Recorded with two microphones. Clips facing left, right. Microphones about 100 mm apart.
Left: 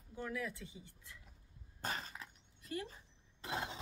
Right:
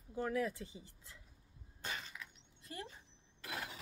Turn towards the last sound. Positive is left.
turn(degrees=25)  # may be behind; listen again after turning